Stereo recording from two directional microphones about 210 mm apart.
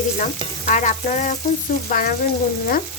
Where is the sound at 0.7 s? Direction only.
35° left (ahead or behind).